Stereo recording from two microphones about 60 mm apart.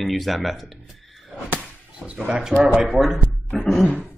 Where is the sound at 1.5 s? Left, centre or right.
Right.